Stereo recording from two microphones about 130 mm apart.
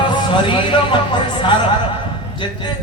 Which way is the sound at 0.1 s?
40° left (ahead or behind).